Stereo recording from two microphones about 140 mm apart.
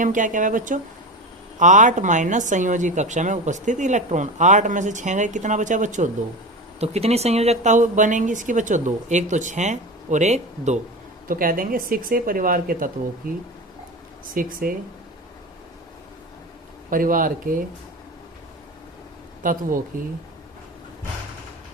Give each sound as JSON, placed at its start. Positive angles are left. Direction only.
{"t": 0.0, "sound": "a woman's voice", "side_deg": -65}
{"t": 6.7, "sound": "a woman's voice", "side_deg": -45}
{"t": 11.3, "sound": "speech", "side_deg": -85}
{"t": 16.9, "sound": "speech", "side_deg": -80}
{"t": 19.4, "sound": "speech", "side_deg": -75}